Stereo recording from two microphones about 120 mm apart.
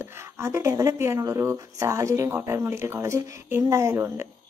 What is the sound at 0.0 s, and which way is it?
Speech, 20° right (ahead or behind).